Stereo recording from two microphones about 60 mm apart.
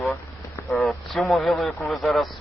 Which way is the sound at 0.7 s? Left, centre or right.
Centre.